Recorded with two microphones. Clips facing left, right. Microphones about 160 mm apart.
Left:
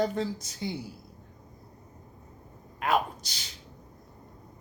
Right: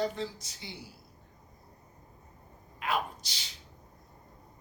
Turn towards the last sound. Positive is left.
turn(degrees=45)  # may be behind; listen again after turning